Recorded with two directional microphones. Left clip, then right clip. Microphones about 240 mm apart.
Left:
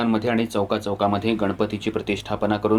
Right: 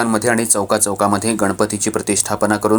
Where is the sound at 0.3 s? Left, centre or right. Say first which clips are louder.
Right 6 dB; right.